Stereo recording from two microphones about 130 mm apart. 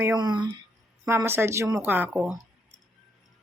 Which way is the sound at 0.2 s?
35° right (ahead or behind).